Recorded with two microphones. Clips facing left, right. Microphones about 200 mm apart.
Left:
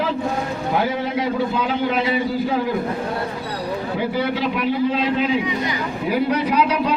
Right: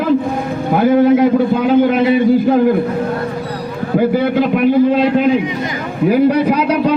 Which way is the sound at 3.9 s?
50° right (ahead or behind).